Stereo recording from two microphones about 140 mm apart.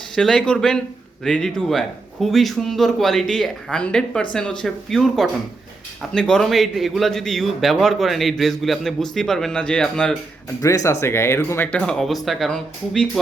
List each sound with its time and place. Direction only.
0.2 s a man's voice: 5° left (ahead or behind)
10.6 s speech: 25° left (ahead or behind)
11.8 s a man's voice: 5° left (ahead or behind)